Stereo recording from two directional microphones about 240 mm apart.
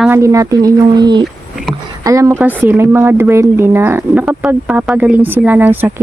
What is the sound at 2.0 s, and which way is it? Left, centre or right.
Speech, centre.